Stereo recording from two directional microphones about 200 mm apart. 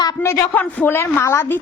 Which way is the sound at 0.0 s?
15° left (ahead or behind).